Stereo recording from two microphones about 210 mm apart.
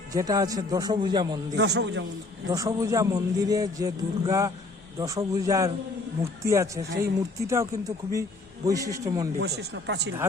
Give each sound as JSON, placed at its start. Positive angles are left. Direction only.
{"t": 0.1, "sound": "a man's voice", "side_deg": -15}
{"t": 1.5, "sound": "speech", "side_deg": -55}
{"t": 2.5, "sound": "a man's voice", "side_deg": -15}
{"t": 9.4, "sound": "speech", "side_deg": -55}